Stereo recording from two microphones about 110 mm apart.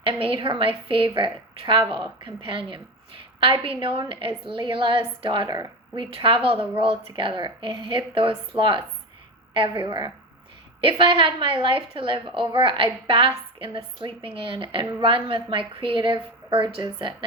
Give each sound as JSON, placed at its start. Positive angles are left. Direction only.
{"t": 0.0, "sound": "a woman's voice", "side_deg": -55}